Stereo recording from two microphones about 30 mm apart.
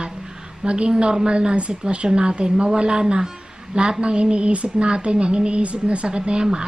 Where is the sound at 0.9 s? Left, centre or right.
Right.